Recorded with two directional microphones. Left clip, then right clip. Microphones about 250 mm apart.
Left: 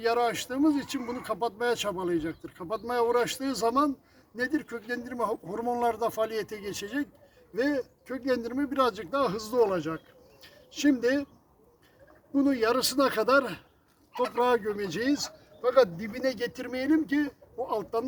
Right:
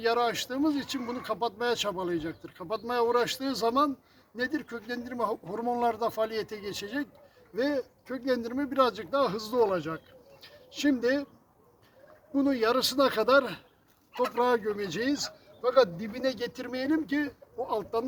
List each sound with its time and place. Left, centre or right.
0.0 s speech: centre
12.3 s speech: centre
14.1 s speech: right
14.3 s speech: centre